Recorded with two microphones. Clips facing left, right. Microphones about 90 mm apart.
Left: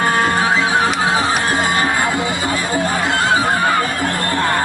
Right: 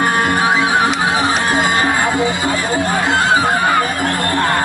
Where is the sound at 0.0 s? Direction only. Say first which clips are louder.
Right 1 dB; 15° right (ahead or behind).